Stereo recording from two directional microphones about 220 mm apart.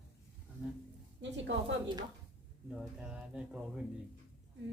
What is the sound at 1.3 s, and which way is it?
Speech, 55° right (ahead or behind).